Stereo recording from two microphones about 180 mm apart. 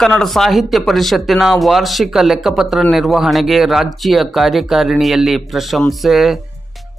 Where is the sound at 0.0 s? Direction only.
Centre (ahead or behind).